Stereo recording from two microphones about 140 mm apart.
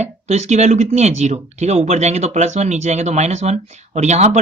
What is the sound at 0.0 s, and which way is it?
Speech, 50° right (ahead or behind).